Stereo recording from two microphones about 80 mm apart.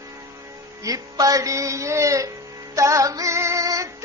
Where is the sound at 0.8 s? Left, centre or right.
Right.